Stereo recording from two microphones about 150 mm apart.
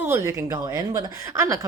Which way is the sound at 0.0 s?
15° right (ahead or behind).